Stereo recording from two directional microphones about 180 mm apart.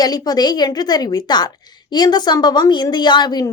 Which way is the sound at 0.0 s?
20° left (ahead or behind).